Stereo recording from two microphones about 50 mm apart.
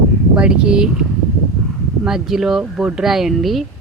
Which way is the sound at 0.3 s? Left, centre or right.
Centre.